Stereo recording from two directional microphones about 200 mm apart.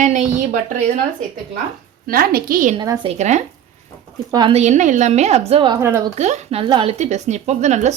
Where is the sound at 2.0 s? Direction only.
45° right (ahead or behind).